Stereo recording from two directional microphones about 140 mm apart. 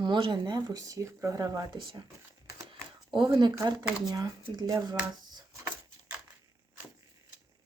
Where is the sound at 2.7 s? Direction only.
35° right (ahead or behind).